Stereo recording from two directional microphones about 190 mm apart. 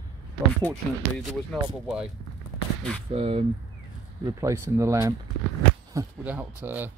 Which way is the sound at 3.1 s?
30° right (ahead or behind).